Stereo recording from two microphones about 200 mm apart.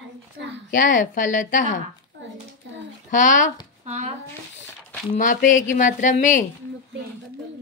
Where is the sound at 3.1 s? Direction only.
40° left (ahead or behind).